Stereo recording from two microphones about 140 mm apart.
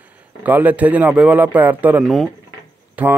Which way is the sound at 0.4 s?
10° right (ahead or behind).